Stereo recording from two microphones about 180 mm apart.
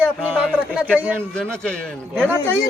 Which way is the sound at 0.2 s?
5° left (ahead or behind).